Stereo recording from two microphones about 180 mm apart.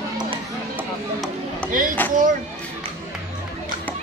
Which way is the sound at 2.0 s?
10° left (ahead or behind).